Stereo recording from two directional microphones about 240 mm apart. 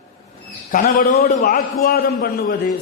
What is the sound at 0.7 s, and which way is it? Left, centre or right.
A man's voice, left.